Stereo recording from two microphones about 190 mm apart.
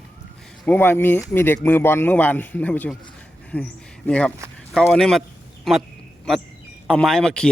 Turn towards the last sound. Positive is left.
turn(degrees=5)  # may be behind; listen again after turning